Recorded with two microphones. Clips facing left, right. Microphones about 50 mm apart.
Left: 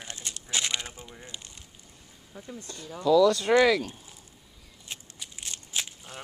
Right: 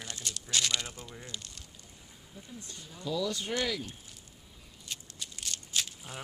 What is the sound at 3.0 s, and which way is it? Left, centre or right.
Speech, left.